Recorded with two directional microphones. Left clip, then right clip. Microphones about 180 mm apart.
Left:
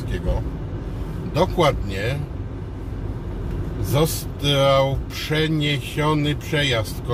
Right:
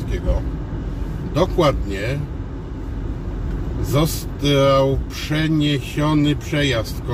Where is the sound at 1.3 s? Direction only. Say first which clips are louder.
Right 1 dB; 20° left (ahead or behind).